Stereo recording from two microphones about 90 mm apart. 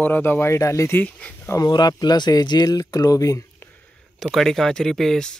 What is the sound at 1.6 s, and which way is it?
Speech, 50° left (ahead or behind).